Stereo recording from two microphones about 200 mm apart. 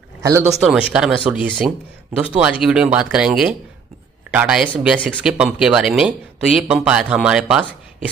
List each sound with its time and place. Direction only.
0.2 s speech: 15° right (ahead or behind)
0.7 s a man's voice: 5° right (ahead or behind)